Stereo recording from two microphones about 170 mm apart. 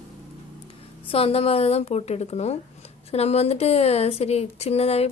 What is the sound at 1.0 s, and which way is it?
A woman's voice, 35° left (ahead or behind).